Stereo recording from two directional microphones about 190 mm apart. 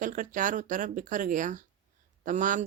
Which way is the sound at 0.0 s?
45° right (ahead or behind).